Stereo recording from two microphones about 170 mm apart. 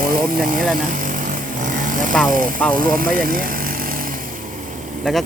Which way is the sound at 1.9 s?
50° right (ahead or behind).